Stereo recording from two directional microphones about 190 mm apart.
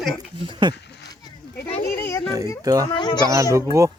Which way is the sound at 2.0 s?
15° left (ahead or behind).